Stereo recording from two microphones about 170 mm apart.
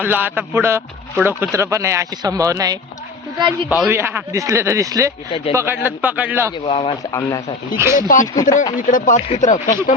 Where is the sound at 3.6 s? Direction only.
5° right (ahead or behind).